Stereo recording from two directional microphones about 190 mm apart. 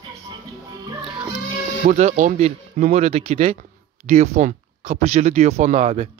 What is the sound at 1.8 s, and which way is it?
Speech, 40° right (ahead or behind).